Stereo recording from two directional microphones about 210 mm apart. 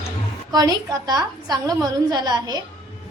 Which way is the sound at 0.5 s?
15° right (ahead or behind).